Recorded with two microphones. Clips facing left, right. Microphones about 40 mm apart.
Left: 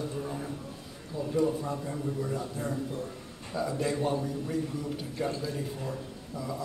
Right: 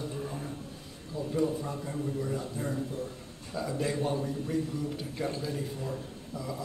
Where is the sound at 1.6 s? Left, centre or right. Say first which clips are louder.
Left 1 dB; centre.